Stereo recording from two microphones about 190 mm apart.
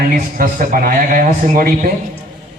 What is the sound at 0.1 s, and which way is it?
A man's voice, 45° right (ahead or behind).